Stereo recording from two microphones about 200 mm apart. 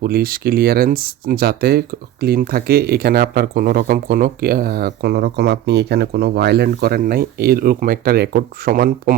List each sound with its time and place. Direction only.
0.0 s speech: 45° right (ahead or behind)